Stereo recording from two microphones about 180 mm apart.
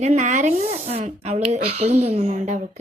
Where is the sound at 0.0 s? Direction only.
40° right (ahead or behind).